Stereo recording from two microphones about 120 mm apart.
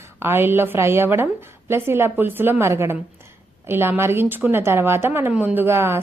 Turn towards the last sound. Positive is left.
turn(degrees=-20)  # may be behind; listen again after turning